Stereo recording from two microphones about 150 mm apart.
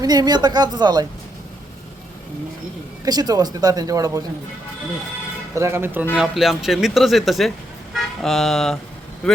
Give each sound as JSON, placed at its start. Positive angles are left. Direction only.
{"t": 0.0, "sound": "speech", "side_deg": -25}
{"t": 3.0, "sound": "speech", "side_deg": -25}
{"t": 5.5, "sound": "a man's voice", "side_deg": -15}
{"t": 6.1, "sound": "speech", "side_deg": 0}